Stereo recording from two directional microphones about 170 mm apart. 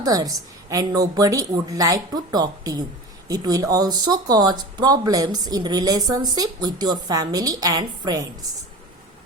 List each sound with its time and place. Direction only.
0.0 s speech: 20° right (ahead or behind)